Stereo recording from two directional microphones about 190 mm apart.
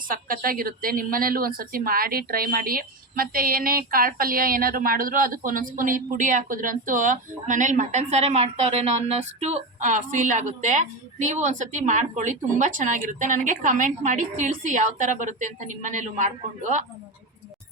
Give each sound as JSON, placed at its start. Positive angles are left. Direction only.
{"t": 0.1, "sound": "a woman's voice", "side_deg": -50}